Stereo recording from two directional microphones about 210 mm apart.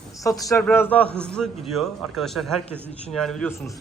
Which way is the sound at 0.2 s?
15° left (ahead or behind).